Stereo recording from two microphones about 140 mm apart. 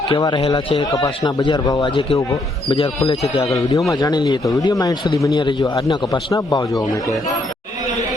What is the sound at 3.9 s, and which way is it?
A man's voice, 25° left (ahead or behind).